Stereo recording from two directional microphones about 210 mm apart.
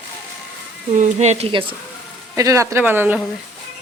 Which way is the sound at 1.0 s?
35° right (ahead or behind).